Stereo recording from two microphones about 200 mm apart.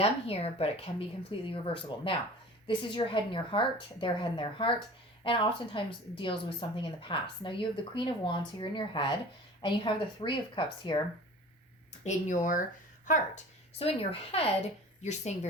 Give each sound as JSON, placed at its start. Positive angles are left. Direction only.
{"t": 0.0, "sound": "a woman's voice", "side_deg": 30}
{"t": 12.0, "sound": "a woman's voice", "side_deg": 40}